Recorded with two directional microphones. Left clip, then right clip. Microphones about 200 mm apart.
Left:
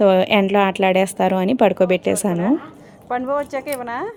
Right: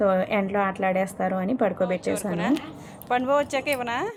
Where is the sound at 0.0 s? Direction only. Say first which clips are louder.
Left 8 dB; 45° left (ahead or behind).